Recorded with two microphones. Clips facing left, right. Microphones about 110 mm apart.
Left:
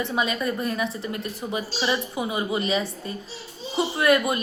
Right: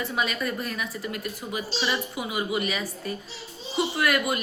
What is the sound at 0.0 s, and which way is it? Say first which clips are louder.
A woman's voice: left 3 dB; 25° left (ahead or behind).